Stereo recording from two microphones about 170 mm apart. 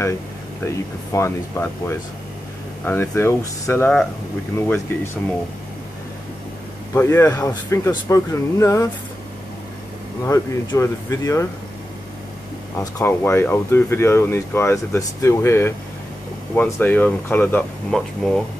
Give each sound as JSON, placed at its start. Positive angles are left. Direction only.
{"t": 0.7, "sound": "speech", "side_deg": 15}
{"t": 6.9, "sound": "speech", "side_deg": 15}
{"t": 10.2, "sound": "speech", "side_deg": 15}
{"t": 12.7, "sound": "speech", "side_deg": 15}